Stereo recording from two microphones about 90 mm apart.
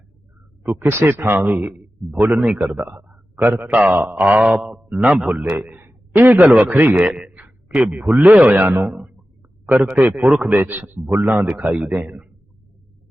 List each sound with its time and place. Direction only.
0.6 s a man's voice: 20° right (ahead or behind)
6.4 s a man's voice: 15° right (ahead or behind)
10.2 s a man's voice: 5° right (ahead or behind)
10.5 s a man's voice: 20° right (ahead or behind)